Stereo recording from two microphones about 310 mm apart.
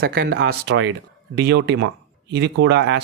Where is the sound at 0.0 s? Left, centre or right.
Right.